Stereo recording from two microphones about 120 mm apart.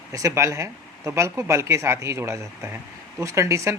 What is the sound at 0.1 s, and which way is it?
Speech, 25° right (ahead or behind).